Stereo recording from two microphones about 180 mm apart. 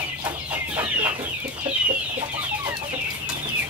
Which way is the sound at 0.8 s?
10° right (ahead or behind).